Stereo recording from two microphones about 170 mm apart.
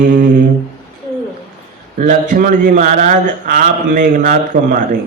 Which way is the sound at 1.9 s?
50° right (ahead or behind).